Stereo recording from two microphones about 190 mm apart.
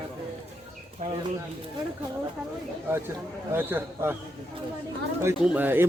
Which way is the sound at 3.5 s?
10° right (ahead or behind).